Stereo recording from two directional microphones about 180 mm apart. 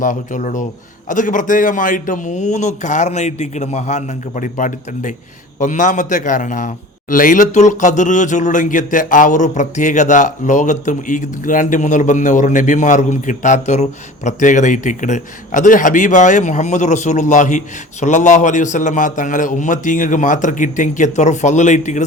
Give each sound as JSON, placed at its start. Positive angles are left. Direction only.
{"t": 0.0, "sound": "a man's voice", "side_deg": 45}